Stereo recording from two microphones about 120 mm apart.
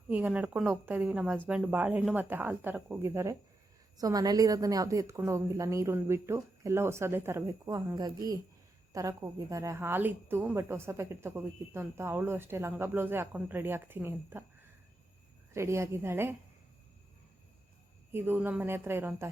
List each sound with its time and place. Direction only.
0.1 s a woman's voice: 10° right (ahead or behind)
7.7 s a woman's voice: 35° right (ahead or behind); by 14.4 s 20° right (ahead or behind)
15.5 s a woman's voice: 25° right (ahead or behind)
18.1 s speech: 15° right (ahead or behind)